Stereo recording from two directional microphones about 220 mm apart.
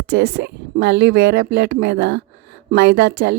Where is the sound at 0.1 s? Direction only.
50° right (ahead or behind).